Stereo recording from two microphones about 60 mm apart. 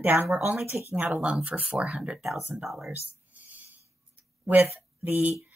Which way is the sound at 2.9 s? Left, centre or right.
Right.